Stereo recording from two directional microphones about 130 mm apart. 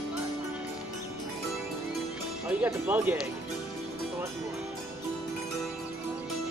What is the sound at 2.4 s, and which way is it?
Speech, 15° right (ahead or behind).